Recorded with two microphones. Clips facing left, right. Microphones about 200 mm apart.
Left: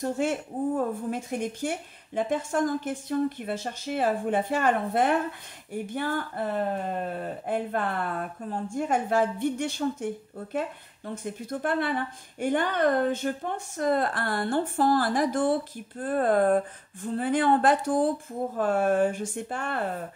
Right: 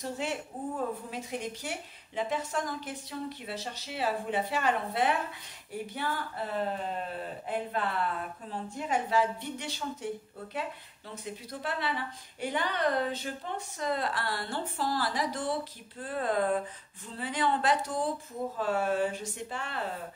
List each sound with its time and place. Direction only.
0.0 s speech: 50° left (ahead or behind)